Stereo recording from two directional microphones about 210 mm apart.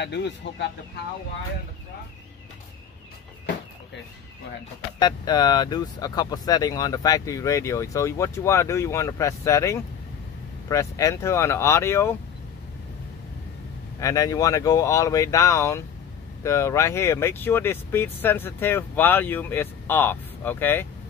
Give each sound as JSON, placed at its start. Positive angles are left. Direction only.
{"t": 0.0, "sound": "speech", "side_deg": 55}
{"t": 4.9, "sound": "speech", "side_deg": 20}
{"t": 13.9, "sound": "speech", "side_deg": 15}